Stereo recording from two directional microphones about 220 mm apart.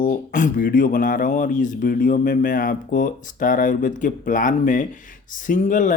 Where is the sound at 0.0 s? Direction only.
40° left (ahead or behind).